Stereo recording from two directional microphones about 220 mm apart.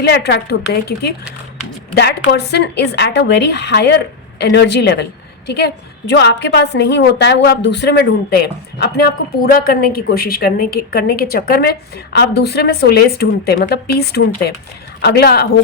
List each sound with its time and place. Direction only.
0.0 s a woman's voice: 50° left (ahead or behind)